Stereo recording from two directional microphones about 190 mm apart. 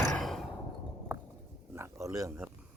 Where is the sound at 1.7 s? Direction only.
15° right (ahead or behind).